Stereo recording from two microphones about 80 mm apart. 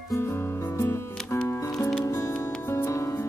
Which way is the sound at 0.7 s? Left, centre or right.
Left.